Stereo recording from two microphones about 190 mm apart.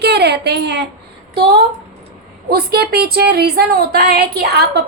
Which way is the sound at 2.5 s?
55° right (ahead or behind).